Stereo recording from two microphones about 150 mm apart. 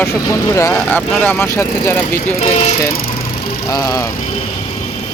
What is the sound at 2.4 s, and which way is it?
Speech, 45° left (ahead or behind).